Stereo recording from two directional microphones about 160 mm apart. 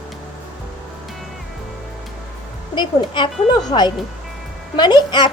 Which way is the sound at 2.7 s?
30° left (ahead or behind).